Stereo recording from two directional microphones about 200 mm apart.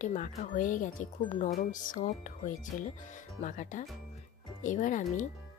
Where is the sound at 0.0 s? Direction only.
40° left (ahead or behind).